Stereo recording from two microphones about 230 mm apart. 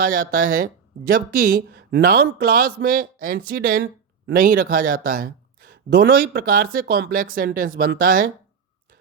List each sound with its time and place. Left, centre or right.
0.1 s speech: right